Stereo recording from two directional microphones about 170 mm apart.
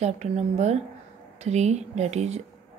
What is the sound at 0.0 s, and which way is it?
A woman's voice, 40° right (ahead or behind).